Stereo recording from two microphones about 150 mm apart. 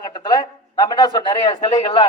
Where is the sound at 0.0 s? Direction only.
30° left (ahead or behind).